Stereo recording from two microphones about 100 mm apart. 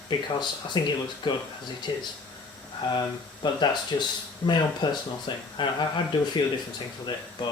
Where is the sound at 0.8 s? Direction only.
50° left (ahead or behind).